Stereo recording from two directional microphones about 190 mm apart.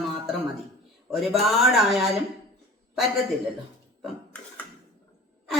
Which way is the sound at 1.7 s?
Centre (ahead or behind).